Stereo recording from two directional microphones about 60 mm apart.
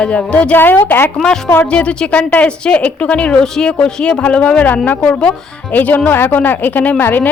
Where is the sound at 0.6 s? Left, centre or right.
Left.